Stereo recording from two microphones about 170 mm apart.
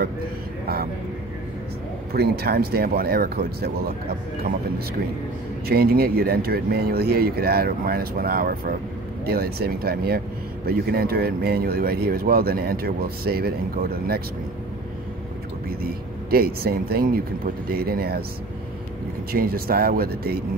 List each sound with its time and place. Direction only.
2.1 s speech: 65° right (ahead or behind)
5.7 s speech: 65° right (ahead or behind)
15.8 s speech: 65° right (ahead or behind)
19.3 s speech: 60° right (ahead or behind)